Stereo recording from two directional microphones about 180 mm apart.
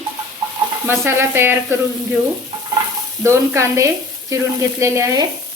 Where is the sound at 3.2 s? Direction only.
15° right (ahead or behind).